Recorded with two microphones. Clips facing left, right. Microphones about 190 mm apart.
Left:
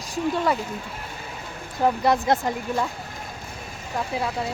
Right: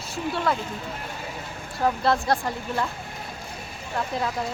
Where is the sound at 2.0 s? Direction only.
20° left (ahead or behind).